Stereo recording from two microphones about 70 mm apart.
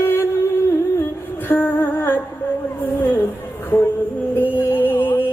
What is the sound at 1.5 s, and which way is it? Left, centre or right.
Humming, left.